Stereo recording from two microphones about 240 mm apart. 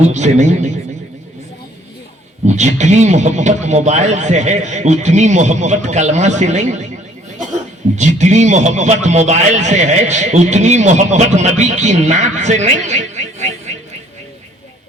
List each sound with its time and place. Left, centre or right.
0.0 s speech: right
2.5 s speech: right
7.9 s speech: right